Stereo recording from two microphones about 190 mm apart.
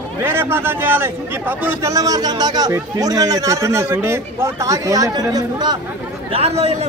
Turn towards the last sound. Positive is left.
turn(degrees=-35)  # may be behind; listen again after turning